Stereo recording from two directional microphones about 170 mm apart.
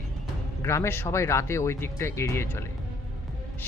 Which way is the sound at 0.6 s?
15° left (ahead or behind).